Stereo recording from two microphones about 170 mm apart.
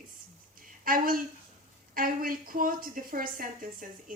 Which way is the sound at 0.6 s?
55° right (ahead or behind).